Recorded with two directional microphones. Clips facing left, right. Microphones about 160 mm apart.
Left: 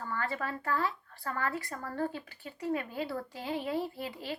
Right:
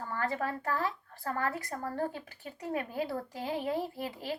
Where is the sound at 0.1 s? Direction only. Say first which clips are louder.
Right 2 dB; 35° right (ahead or behind).